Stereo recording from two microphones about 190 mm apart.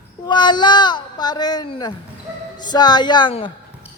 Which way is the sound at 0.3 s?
25° left (ahead or behind).